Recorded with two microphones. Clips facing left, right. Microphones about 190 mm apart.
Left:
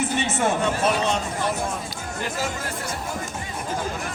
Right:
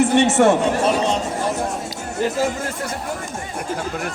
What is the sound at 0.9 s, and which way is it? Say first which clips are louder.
Speech: right 4 dB; 30° right (ahead or behind).